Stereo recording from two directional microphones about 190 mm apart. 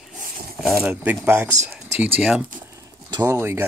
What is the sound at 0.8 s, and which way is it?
Speech, 10° right (ahead or behind).